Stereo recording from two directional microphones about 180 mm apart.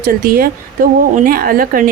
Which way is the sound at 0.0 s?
55° right (ahead or behind).